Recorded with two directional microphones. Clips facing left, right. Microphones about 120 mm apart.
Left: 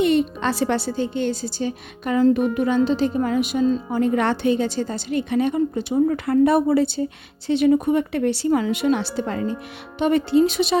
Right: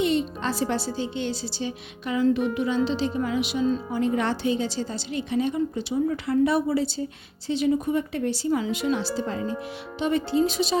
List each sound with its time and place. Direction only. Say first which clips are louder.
0.0 s a woman's voice: left 5 dB; 60° left (ahead or behind)